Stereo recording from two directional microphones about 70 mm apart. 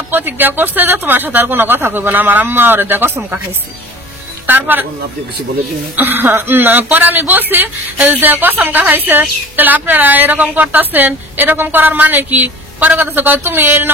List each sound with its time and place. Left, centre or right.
0.1 s speech: right
4.5 s speech: right
5.9 s speech: right